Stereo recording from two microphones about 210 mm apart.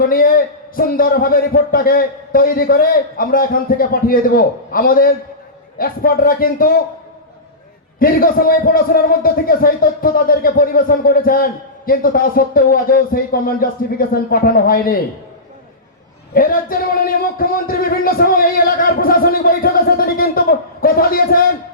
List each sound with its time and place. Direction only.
0.0 s speech: 45° left (ahead or behind)
7.9 s speech: 45° left (ahead or behind)
16.3 s speech: 45° left (ahead or behind)